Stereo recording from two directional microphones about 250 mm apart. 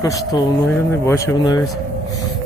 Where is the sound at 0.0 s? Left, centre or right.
Centre.